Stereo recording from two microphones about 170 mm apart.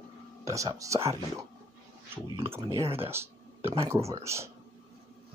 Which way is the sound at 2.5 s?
20° right (ahead or behind).